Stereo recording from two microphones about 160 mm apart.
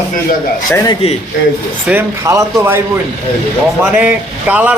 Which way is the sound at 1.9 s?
15° right (ahead or behind).